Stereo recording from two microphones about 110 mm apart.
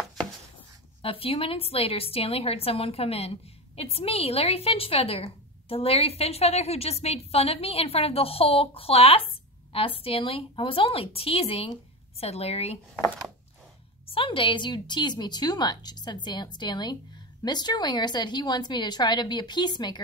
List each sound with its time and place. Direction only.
1.0 s a woman's voice: 60° left (ahead or behind)
14.0 s a woman's voice: 55° left (ahead or behind)